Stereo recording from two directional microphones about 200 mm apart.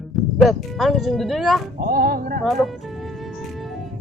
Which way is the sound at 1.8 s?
45° right (ahead or behind).